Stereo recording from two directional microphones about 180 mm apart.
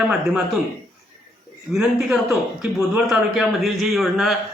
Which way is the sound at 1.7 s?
Centre (ahead or behind).